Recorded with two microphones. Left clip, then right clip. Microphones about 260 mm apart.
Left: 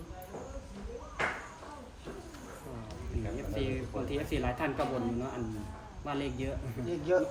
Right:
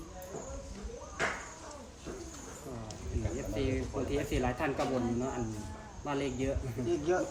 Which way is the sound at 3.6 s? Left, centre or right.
Centre.